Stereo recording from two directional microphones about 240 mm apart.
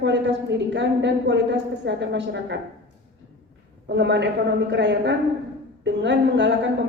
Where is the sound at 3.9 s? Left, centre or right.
Right.